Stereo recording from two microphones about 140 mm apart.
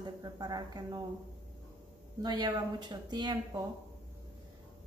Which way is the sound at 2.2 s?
30° right (ahead or behind).